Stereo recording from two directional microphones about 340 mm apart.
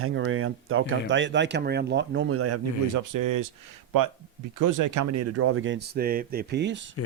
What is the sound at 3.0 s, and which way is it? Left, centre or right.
Speech, right.